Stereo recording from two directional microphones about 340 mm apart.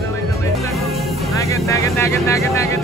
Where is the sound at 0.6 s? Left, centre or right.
Centre.